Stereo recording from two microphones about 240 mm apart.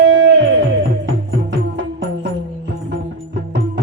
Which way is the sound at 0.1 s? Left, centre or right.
Right.